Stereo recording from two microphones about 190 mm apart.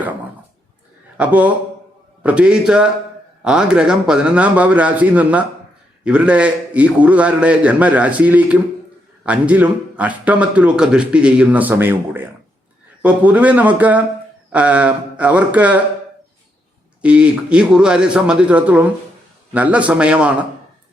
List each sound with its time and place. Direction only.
1.1 s a man's voice: 5° right (ahead or behind)
17.0 s a man's voice: 5° right (ahead or behind)